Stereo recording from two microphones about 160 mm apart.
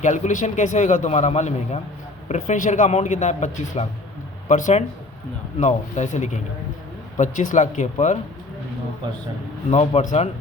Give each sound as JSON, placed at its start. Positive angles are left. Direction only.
{"t": 0.0, "sound": "a man's voice", "side_deg": 50}
{"t": 9.6, "sound": "a man's voice", "side_deg": 45}